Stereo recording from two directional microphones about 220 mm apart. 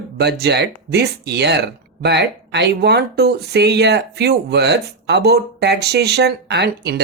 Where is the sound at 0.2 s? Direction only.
45° right (ahead or behind).